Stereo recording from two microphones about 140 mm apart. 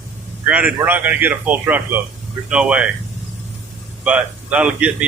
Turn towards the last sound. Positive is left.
turn(degrees=-10)  # may be behind; listen again after turning